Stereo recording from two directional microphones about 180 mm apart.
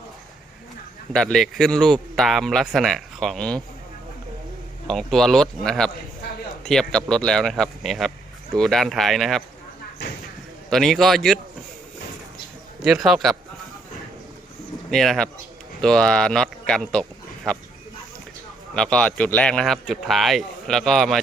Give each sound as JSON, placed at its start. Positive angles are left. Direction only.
{"t": 1.1, "sound": "speech", "side_deg": 0}
{"t": 4.9, "sound": "speech", "side_deg": 0}
{"t": 10.7, "sound": "speech", "side_deg": 0}
{"t": 12.8, "sound": "speech", "side_deg": -5}
{"t": 14.8, "sound": "speech", "side_deg": 0}
{"t": 18.7, "sound": "speech", "side_deg": 5}